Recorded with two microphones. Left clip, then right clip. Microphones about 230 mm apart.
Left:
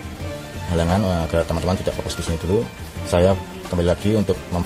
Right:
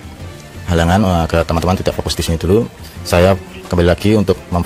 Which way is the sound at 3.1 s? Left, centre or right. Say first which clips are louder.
Right 5 dB; right.